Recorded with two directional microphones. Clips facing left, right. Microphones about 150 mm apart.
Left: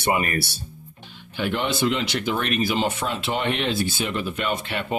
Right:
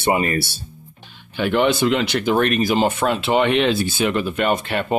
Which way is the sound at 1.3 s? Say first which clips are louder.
Right 7 dB; 70° right (ahead or behind).